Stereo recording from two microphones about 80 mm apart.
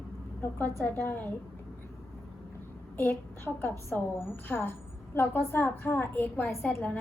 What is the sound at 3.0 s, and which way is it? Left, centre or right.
A woman's voice, left.